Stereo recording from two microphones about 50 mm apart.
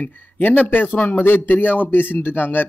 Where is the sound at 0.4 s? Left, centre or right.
Left.